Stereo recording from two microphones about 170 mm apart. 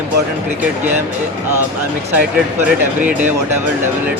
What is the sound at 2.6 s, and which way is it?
Speech, 10° right (ahead or behind).